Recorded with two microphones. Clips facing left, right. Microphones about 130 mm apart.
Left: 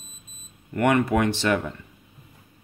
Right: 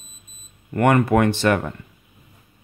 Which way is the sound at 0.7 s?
50° right (ahead or behind).